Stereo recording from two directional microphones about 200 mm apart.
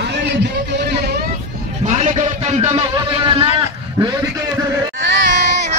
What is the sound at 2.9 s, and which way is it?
A man's voice, 25° right (ahead or behind).